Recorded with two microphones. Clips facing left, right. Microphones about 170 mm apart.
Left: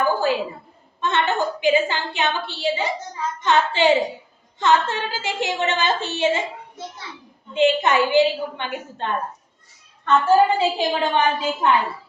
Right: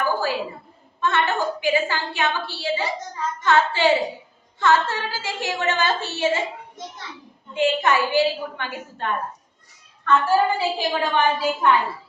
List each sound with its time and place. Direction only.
0.0 s a sound: 20° left (ahead or behind)
1.0 s a woman's voice: 20° left (ahead or behind)
7.5 s a woman's voice: 20° left (ahead or behind)